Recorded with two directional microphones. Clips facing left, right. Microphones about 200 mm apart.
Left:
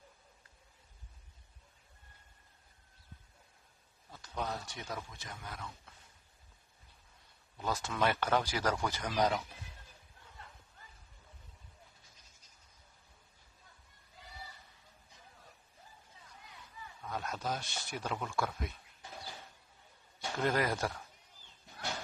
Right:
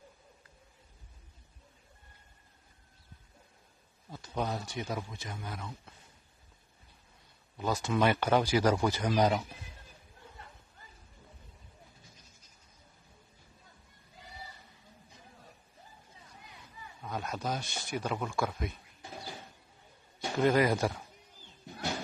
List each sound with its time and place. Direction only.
4.1 s speech: 20° right (ahead or behind)
7.6 s speech: 10° right (ahead or behind)
17.0 s speech: 10° right (ahead or behind)
20.2 s a man's voice: 10° right (ahead or behind)